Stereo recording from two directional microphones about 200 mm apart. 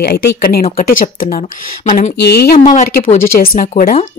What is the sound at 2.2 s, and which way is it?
A woman's voice, 55° left (ahead or behind).